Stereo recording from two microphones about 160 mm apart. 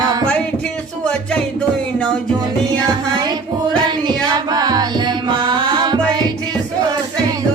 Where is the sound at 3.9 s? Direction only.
25° right (ahead or behind).